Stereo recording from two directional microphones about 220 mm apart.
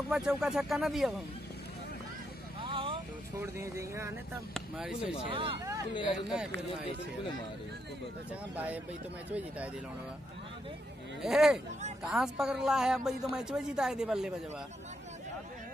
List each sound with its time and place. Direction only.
0.1 s speech: centre (ahead or behind)
2.6 s vehicle: 25° right (ahead or behind)
3.3 s speech: 15° right (ahead or behind)
5.3 s speech: 25° right (ahead or behind)
6.3 s speech: 5° right (ahead or behind)
8.5 s speech: 5° right (ahead or behind)
11.2 s speech: centre (ahead or behind)